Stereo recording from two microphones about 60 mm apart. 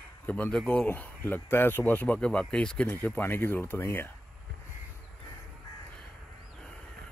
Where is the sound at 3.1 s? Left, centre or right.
Left.